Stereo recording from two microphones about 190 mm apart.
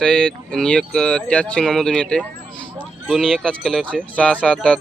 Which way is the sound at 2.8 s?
10° right (ahead or behind).